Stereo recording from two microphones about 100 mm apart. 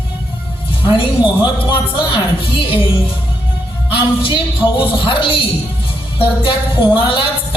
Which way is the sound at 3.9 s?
60° left (ahead or behind).